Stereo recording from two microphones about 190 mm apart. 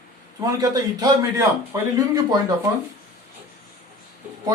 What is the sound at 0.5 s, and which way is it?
Speech, 20° right (ahead or behind).